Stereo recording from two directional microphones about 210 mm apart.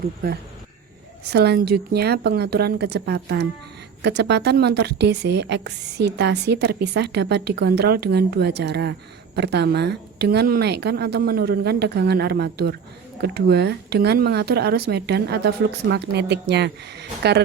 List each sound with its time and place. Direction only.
1.3 s a woman's voice: 50° right (ahead or behind)